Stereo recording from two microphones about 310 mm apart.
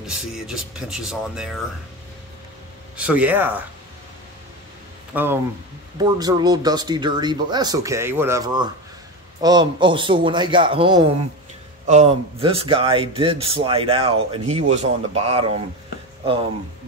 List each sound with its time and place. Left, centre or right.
0.0 s speech: centre
3.0 s speech: centre
5.1 s speech: centre